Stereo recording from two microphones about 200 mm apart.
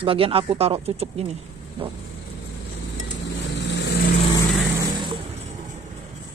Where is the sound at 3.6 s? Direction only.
60° left (ahead or behind).